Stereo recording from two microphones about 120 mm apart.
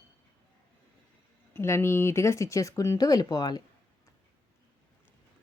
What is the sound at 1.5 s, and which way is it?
A woman's voice, 20° left (ahead or behind).